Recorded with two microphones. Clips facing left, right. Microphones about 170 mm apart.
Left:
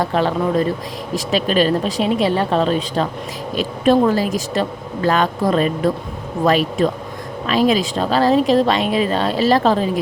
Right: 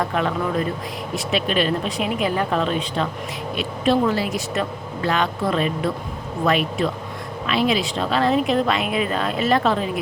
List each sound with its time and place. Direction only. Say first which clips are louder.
0.0 s speech: left 4 dB; 35° left (ahead or behind)